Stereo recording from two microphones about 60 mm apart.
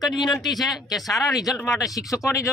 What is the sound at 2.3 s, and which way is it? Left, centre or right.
Speech, left.